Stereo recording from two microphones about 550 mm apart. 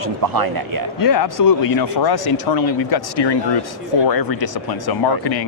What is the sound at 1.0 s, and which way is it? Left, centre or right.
Speech, left.